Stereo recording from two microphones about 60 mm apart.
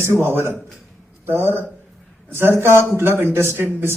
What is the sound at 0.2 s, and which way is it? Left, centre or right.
A man's voice, right.